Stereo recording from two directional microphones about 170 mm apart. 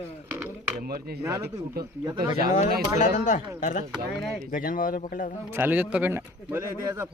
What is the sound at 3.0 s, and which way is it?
Speech, 45° left (ahead or behind).